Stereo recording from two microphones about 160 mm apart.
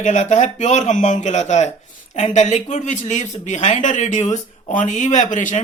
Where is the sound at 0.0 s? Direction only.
50° left (ahead or behind).